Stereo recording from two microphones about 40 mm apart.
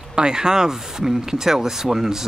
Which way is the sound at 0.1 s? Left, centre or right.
Centre.